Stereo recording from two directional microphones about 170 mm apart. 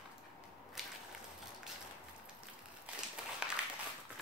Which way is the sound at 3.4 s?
5° right (ahead or behind).